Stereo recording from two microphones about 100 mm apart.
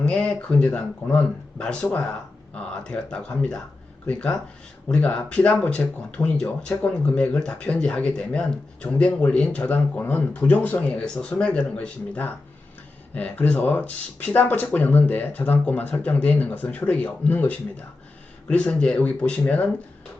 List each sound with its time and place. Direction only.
0.0 s speech: 10° left (ahead or behind)